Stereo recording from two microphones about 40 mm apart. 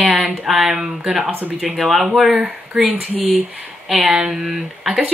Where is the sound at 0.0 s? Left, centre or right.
Centre.